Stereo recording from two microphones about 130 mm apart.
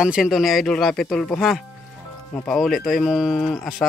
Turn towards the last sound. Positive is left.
turn(degrees=0)  # may be behind; listen again after turning